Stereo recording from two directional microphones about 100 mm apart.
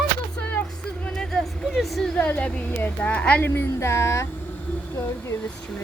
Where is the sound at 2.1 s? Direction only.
15° left (ahead or behind).